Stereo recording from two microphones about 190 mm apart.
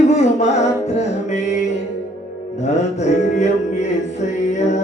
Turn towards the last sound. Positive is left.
turn(degrees=35)  # may be behind; listen again after turning